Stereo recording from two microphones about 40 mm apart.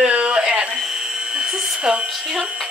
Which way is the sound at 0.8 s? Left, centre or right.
Centre.